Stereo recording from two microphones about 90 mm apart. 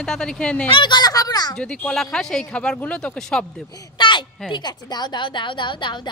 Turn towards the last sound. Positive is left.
turn(degrees=60)  # may be behind; listen again after turning